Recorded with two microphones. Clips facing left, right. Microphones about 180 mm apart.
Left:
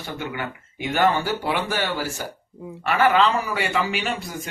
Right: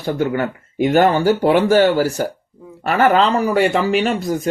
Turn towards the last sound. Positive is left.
turn(degrees=-40)  # may be behind; listen again after turning